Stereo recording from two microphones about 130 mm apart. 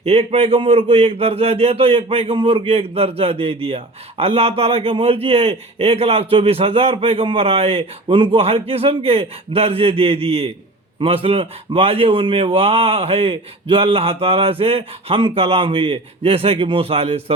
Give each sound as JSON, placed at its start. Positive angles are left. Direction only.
{"t": 0.0, "sound": "speech", "side_deg": -50}